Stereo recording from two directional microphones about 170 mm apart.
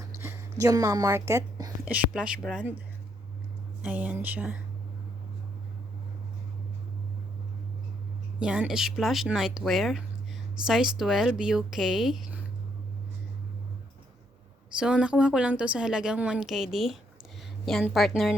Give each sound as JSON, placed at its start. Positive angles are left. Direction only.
{"t": 0.0, "sound": "a sound", "side_deg": -15}
{"t": 1.8, "sound": "a woman's voice", "side_deg": -10}
{"t": 3.8, "sound": "speech", "side_deg": -10}
{"t": 8.4, "sound": "a woman's voice", "side_deg": -5}
{"t": 14.8, "sound": "a woman's voice", "side_deg": -5}